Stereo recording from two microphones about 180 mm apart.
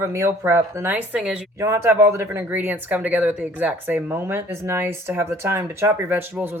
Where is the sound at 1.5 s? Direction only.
15° right (ahead or behind).